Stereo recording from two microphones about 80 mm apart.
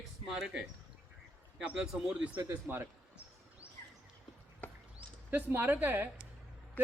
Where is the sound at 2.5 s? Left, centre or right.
Right.